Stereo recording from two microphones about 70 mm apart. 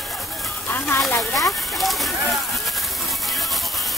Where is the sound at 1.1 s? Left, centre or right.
Centre.